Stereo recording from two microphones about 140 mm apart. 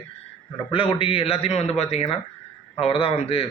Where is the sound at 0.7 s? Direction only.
40° left (ahead or behind).